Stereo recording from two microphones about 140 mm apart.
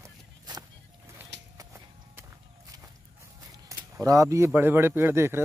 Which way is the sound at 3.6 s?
25° right (ahead or behind).